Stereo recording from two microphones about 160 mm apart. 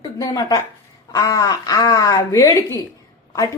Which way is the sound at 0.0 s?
20° left (ahead or behind).